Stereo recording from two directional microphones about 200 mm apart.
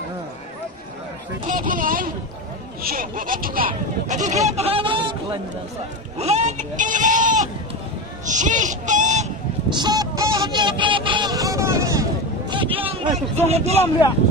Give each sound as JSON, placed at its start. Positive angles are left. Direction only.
{"t": 1.5, "sound": "speech", "side_deg": -40}
{"t": 9.8, "sound": "vehicle", "side_deg": -20}
{"t": 12.4, "sound": "a sound", "side_deg": -25}
{"t": 13.5, "sound": "speech", "side_deg": -30}